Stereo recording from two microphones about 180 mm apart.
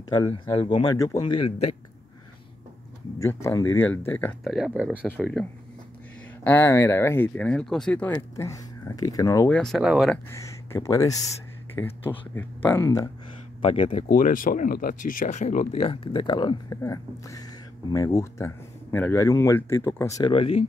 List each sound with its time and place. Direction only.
0.2 s speech: 25° left (ahead or behind)
1.2 s speech: 30° left (ahead or behind)
3.2 s speech: 15° left (ahead or behind)
4.5 s speech: centre (ahead or behind)
5.0 s speech: 5° left (ahead or behind)
8.1 s speech: 15° left (ahead or behind)
9.5 s speech: centre (ahead or behind)
10.1 s speech: 15° left (ahead or behind)
13.7 s speech: 30° left (ahead or behind)
14.0 s speech: 45° left (ahead or behind); by 20.6 s 30° left (ahead or behind)